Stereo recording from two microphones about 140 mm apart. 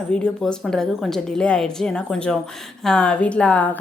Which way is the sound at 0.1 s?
5° left (ahead or behind).